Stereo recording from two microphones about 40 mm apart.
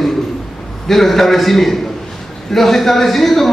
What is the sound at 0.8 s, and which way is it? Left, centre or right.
A man's voice, centre.